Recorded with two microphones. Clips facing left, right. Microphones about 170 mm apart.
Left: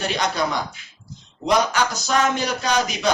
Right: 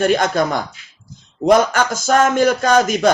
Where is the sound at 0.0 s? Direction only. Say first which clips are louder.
Right 7 dB; 50° right (ahead or behind).